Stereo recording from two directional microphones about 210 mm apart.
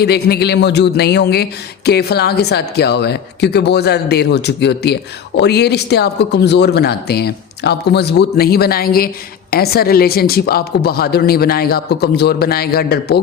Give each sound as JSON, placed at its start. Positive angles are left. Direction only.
{"t": 0.0, "sound": "speech", "side_deg": 50}